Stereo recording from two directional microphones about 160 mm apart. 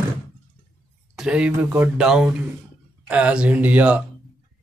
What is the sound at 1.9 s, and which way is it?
Speech, 5° right (ahead or behind).